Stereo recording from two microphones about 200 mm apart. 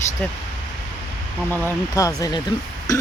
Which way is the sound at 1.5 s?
15° left (ahead or behind).